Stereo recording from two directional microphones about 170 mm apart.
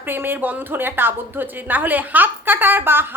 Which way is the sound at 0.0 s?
10° right (ahead or behind).